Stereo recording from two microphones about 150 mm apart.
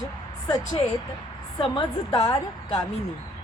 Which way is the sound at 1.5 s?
35° left (ahead or behind).